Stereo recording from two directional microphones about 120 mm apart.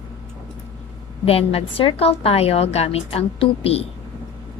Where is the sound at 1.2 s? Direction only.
55° left (ahead or behind).